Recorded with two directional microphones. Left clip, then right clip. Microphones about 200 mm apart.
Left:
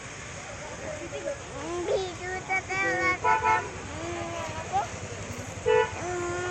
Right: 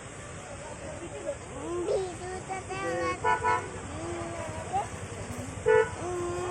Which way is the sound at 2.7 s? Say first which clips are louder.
Left 4 dB; 10° right (ahead or behind).